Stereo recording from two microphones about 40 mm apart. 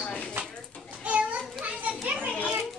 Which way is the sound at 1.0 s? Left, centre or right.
Right.